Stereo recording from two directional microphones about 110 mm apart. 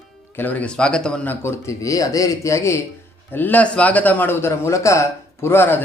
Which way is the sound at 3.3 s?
15° left (ahead or behind).